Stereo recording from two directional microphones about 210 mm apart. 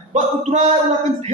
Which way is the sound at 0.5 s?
35° right (ahead or behind).